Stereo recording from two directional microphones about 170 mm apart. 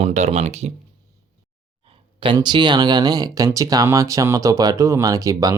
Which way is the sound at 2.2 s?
30° right (ahead or behind).